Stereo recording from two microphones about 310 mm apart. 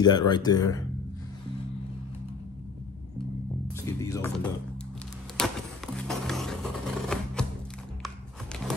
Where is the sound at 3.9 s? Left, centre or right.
Centre.